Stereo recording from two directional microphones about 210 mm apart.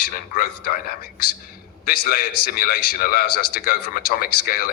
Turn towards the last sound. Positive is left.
turn(degrees=45)  # may be behind; listen again after turning